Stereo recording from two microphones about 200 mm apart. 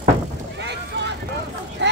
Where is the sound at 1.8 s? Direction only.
60° right (ahead or behind).